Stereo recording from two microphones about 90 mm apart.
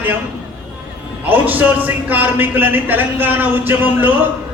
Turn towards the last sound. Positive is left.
turn(degrees=-20)  # may be behind; listen again after turning